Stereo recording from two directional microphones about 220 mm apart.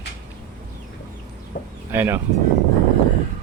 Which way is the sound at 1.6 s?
45° left (ahead or behind).